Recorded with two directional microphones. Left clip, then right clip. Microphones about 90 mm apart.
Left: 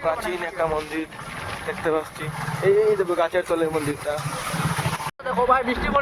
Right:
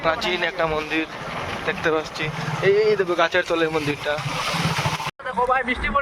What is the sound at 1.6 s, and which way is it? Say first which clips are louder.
Speech: right 2 dB; 30° left (ahead or behind).